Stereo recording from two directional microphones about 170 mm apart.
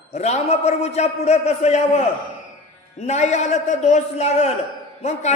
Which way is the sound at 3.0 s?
40° left (ahead or behind).